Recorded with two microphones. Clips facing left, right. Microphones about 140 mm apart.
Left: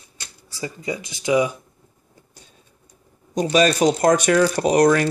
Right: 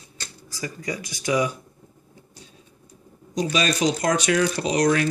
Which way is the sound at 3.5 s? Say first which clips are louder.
Left 7 dB; 45° left (ahead or behind).